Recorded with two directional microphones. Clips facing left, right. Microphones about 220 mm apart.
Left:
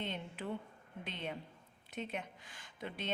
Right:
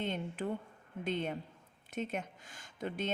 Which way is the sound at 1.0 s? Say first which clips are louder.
Right 8 dB; 45° right (ahead or behind).